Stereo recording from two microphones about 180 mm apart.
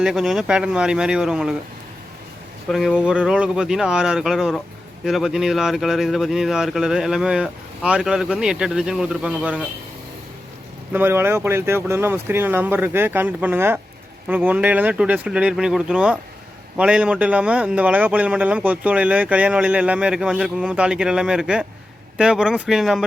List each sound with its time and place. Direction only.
0.0 s speech: centre (ahead or behind)
2.6 s speech: centre (ahead or behind)
10.9 s a man's voice: 15° right (ahead or behind)